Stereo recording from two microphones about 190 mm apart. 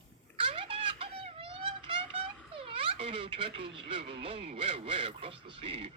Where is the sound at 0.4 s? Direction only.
30° right (ahead or behind).